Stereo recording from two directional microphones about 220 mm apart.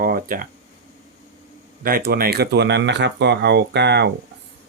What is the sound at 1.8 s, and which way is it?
Speech, 40° right (ahead or behind).